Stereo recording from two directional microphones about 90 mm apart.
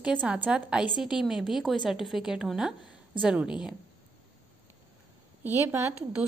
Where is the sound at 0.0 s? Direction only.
15° right (ahead or behind).